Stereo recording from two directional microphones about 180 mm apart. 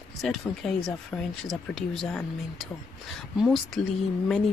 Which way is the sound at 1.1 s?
Centre (ahead or behind).